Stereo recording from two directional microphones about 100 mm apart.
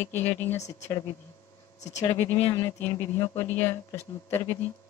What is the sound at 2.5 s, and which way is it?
Speech, 35° left (ahead or behind).